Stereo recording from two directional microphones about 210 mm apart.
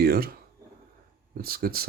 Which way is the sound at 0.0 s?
50° right (ahead or behind).